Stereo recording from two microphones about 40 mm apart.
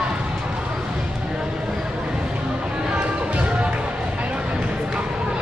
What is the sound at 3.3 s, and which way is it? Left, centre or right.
Music, right.